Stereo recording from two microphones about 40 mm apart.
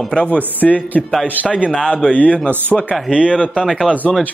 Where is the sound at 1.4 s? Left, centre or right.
Right.